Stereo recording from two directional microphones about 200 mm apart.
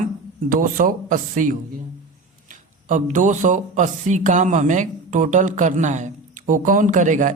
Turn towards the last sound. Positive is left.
turn(degrees=-40)  # may be behind; listen again after turning